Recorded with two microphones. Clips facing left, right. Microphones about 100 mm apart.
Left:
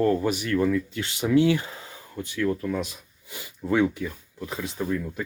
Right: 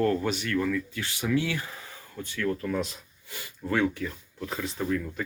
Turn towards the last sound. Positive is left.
turn(degrees=10)  # may be behind; listen again after turning